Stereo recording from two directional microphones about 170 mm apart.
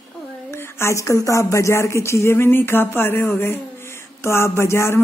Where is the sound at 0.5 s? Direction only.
15° left (ahead or behind).